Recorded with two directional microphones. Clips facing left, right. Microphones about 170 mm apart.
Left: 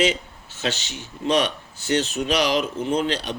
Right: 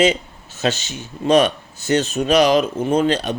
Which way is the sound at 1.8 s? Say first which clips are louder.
Right 4 dB; 45° right (ahead or behind).